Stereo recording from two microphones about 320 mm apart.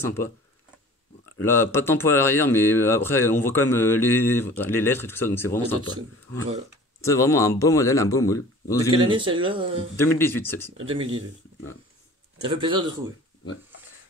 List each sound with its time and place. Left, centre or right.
0.0 s speech: centre
1.4 s speech: centre
7.0 s speech: centre
9.1 s speech: centre
9.9 s speech: centre
10.9 s speech: centre
12.4 s speech: centre